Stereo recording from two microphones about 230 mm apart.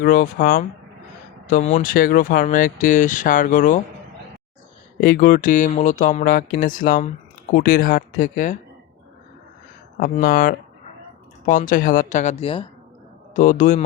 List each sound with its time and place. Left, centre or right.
0.0 s speech: left
4.9 s speech: left
10.0 s speech: left